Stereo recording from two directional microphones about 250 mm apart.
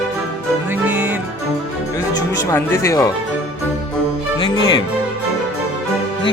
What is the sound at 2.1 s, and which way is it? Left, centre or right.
Speech, centre.